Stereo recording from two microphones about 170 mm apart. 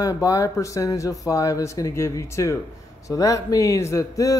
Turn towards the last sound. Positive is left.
turn(degrees=20)  # may be behind; listen again after turning